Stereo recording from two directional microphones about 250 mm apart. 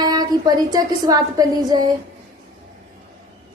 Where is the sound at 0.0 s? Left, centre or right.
Centre.